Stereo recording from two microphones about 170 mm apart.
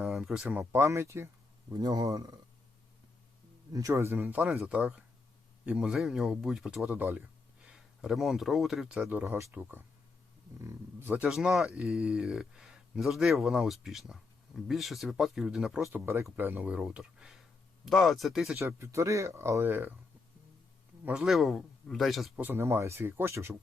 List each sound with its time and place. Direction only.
0.0 s a man's voice: 5° right (ahead or behind); by 2.4 s 20° right (ahead or behind)
3.7 s speech: 20° right (ahead or behind); by 9.0 s centre (ahead or behind)
9.0 s speech: 10° right (ahead or behind)
18.6 s speech: 15° right (ahead or behind)
21.0 s speech: 5° right (ahead or behind)
22.4 s speech: 15° right (ahead or behind)